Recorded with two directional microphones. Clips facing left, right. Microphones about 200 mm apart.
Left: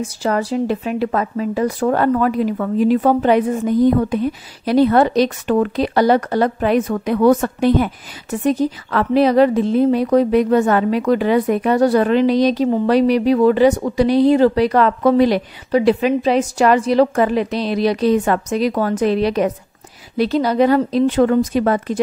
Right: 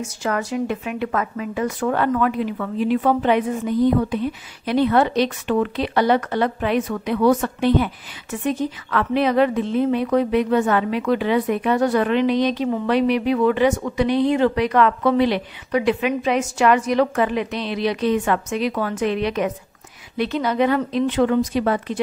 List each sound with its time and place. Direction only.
0.0 s a woman's voice: 35° left (ahead or behind)